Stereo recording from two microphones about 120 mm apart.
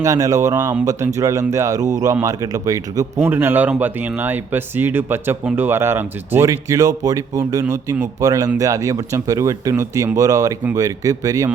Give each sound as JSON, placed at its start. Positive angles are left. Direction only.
{"t": 0.0, "sound": "speech", "side_deg": -30}
{"t": 3.2, "sound": "speech", "side_deg": -20}